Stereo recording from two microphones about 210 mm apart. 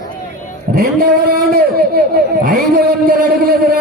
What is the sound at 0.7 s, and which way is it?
A man's voice, 45° right (ahead or behind).